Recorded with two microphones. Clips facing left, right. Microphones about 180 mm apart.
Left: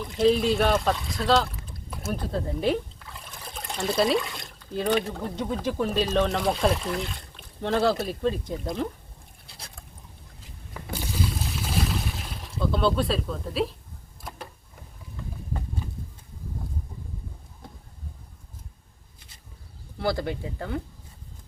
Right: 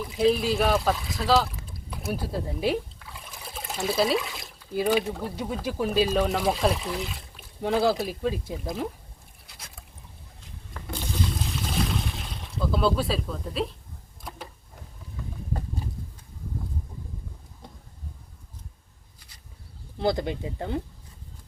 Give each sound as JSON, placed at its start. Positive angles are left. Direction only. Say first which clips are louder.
{"t": 0.0, "sound": "speech", "louder": "left 1 dB", "side_deg": 0}
{"t": 10.8, "sound": "a sound", "louder": "left 1 dB", "side_deg": 5}
{"t": 20.0, "sound": "speech", "louder": "right 2 dB", "side_deg": -20}